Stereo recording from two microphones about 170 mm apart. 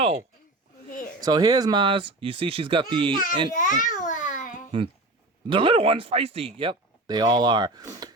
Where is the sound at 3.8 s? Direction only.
50° left (ahead or behind).